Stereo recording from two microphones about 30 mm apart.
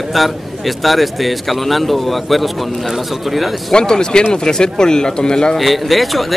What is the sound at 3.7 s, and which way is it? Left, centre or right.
Speech, left.